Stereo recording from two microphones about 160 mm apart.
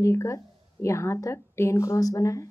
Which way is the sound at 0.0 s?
15° left (ahead or behind).